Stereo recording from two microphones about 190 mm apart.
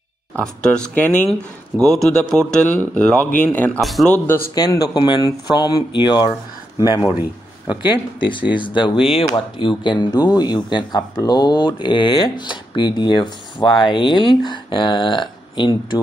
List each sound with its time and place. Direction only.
0.4 s speech: 5° left (ahead or behind)
4.6 s speech: 20° left (ahead or behind)
7.1 s a man's voice: 10° right (ahead or behind)
8.2 s speech: 25° left (ahead or behind)